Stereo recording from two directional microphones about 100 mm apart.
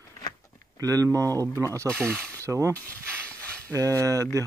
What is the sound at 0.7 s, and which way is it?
Speech, 35° right (ahead or behind).